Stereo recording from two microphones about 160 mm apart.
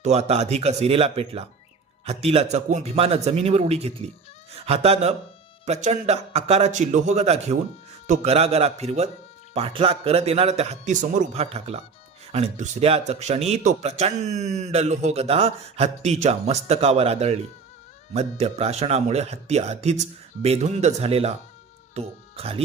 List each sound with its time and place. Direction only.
0.0 s a man's voice: 40° right (ahead or behind)